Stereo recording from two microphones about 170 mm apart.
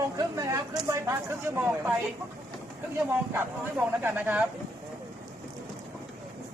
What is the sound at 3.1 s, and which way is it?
Speech, 15° right (ahead or behind).